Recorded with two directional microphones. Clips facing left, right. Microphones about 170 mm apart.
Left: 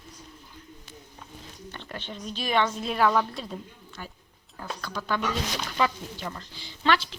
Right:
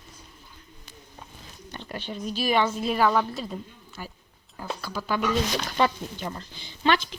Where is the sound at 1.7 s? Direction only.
15° right (ahead or behind).